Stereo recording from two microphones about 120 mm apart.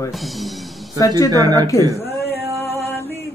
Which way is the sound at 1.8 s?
25° right (ahead or behind).